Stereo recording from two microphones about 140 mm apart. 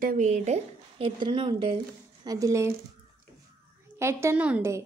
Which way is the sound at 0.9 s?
40° right (ahead or behind).